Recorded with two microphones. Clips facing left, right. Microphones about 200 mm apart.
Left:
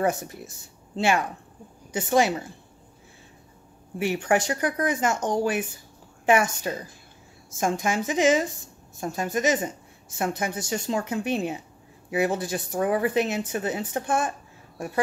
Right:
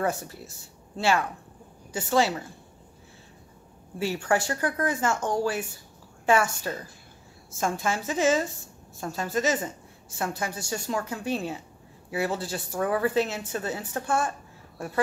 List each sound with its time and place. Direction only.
0.0 s a woman's voice: 20° left (ahead or behind)
4.0 s a woman's voice: 20° left (ahead or behind)